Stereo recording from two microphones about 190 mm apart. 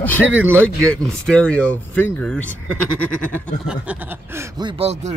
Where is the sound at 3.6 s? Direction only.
10° right (ahead or behind); by 5.1 s 30° right (ahead or behind).